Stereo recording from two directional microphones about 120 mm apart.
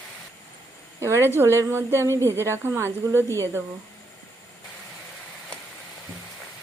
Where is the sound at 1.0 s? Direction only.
20° right (ahead or behind).